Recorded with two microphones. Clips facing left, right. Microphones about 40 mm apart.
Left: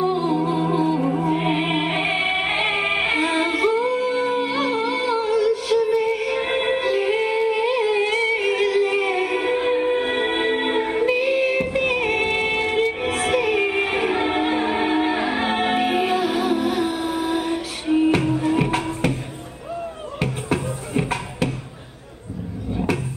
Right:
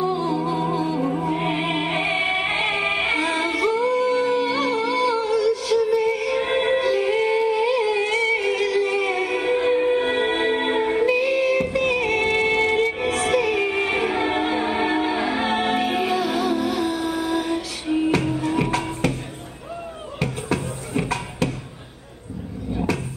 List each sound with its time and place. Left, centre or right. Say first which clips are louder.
0.0 s music: left 2 dB; left
1.0 s music: left 2 dB; centre
1.4 s music: left 2 dB; left
2.6 s female singing: left 1 dB; left
6.4 s music: right 3 dB; centre
6.8 s music: even; left
9.8 s music: right 1 dB; centre
11.1 s music: even; left
13.9 s music: left 1 dB; centre; by 17.6 s left
17.8 s music: left 4 dB; centre
18.4 s music: left 2 dB; left
20.2 s music: left 1 dB; left